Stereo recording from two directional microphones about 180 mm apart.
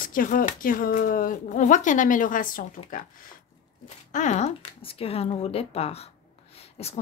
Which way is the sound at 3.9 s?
40° left (ahead or behind).